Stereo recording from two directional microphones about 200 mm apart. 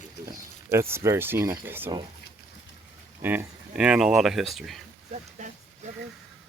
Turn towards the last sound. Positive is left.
turn(degrees=-35)  # may be behind; listen again after turning